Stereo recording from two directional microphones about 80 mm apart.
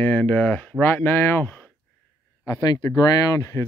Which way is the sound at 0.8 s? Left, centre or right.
Left.